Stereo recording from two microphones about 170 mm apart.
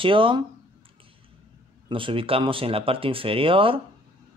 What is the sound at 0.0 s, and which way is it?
Speech, 30° right (ahead or behind).